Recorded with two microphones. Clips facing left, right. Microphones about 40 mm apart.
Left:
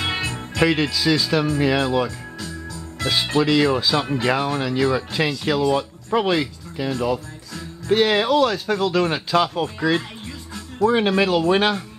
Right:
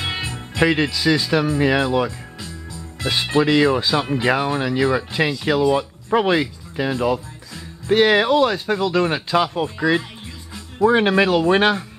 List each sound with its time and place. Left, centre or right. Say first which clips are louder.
0.2 s speech: right 3 dB; centre
3.0 s speech: right 1 dB; centre